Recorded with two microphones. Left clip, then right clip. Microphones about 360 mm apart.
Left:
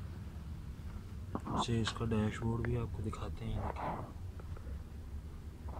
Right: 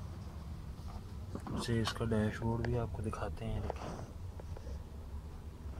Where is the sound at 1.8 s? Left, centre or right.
Centre.